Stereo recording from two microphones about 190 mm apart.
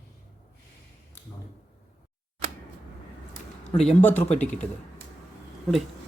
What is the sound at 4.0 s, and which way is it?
Speech, 10° left (ahead or behind).